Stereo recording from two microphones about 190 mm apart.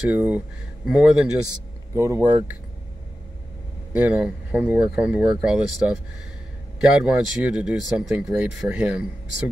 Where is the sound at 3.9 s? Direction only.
10° right (ahead or behind).